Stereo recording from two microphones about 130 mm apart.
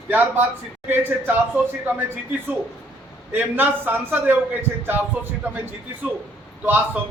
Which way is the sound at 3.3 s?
15° right (ahead or behind).